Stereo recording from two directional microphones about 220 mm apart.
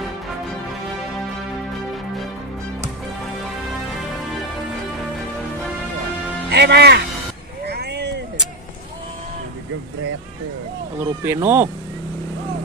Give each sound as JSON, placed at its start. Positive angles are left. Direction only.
{"t": 6.5, "sound": "speech", "side_deg": -50}
{"t": 7.6, "sound": "a sound", "side_deg": -50}
{"t": 11.2, "sound": "speech", "side_deg": -10}